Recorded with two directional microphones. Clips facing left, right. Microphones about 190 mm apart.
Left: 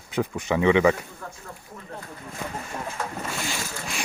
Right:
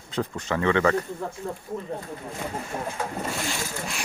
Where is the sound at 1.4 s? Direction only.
25° right (ahead or behind).